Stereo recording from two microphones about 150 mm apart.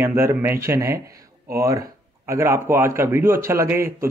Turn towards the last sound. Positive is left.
turn(degrees=-15)  # may be behind; listen again after turning